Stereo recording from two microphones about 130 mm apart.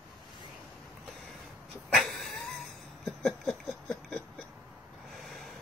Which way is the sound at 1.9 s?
Centre (ahead or behind).